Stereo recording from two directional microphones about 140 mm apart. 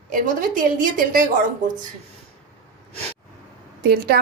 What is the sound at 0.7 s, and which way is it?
Speech, 75° right (ahead or behind).